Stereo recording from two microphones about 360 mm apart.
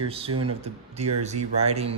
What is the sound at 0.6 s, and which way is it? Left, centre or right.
Speech, centre.